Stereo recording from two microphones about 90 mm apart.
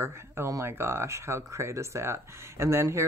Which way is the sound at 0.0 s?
30° right (ahead or behind).